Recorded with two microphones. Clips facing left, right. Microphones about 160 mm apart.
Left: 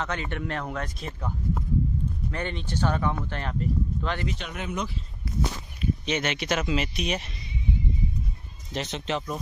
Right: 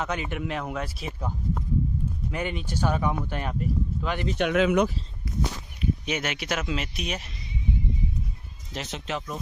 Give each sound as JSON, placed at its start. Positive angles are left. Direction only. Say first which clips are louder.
{"t": 0.0, "sound": "speech", "louder": "right 1 dB", "side_deg": -10}
{"t": 2.3, "sound": "speech", "louder": "right 3 dB", "side_deg": -10}
{"t": 4.4, "sound": "speech", "louder": "right 11 dB", "side_deg": -85}
{"t": 5.8, "sound": "speech", "louder": "left 1 dB", "side_deg": -10}
{"t": 8.7, "sound": "speech", "louder": "left 3 dB", "side_deg": -5}